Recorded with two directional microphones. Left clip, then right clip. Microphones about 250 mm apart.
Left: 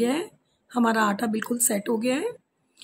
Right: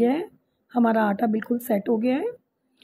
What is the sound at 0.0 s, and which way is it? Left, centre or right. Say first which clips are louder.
A woman's voice: right 3 dB; centre.